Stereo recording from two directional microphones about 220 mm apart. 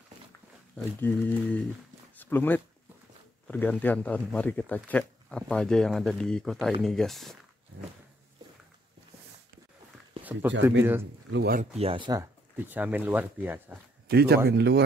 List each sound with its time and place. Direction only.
0.7 s speech: 10° left (ahead or behind)
10.8 s speech: 10° right (ahead or behind)
11.2 s speech: 50° right (ahead or behind)
11.7 s speech: 25° right (ahead or behind); by 13.7 s 10° right (ahead or behind)
14.0 s speech: 45° right (ahead or behind)